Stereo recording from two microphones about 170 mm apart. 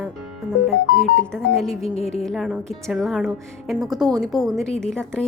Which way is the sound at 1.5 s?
Centre (ahead or behind).